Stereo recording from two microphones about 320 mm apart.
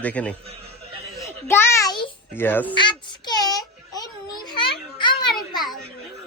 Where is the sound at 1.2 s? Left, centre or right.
Centre.